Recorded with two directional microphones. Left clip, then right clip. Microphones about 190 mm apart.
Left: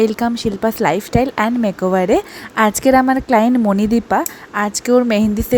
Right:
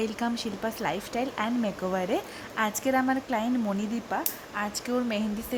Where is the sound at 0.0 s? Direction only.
30° left (ahead or behind).